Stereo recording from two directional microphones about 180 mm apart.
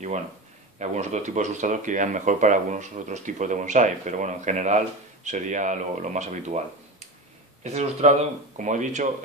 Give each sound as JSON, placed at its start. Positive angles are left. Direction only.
{"t": 0.7, "sound": "speech", "side_deg": -40}
{"t": 7.6, "sound": "speech", "side_deg": -40}